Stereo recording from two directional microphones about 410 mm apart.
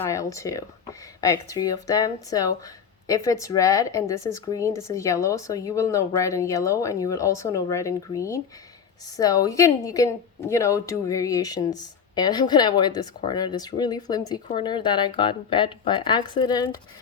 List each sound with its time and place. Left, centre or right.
0.0 s a woman's voice: centre